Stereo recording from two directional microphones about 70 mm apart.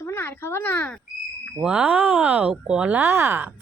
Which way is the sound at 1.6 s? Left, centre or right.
Centre.